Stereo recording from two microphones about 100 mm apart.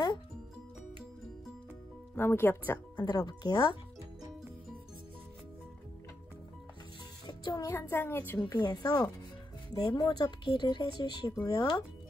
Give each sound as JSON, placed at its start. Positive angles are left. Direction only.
{"t": 2.1, "sound": "speech", "side_deg": 25}
{"t": 3.1, "sound": "speech", "side_deg": 45}
{"t": 7.2, "sound": "music", "side_deg": 40}
{"t": 7.7, "sound": "speech", "side_deg": 20}
{"t": 8.5, "sound": "speech", "side_deg": 40}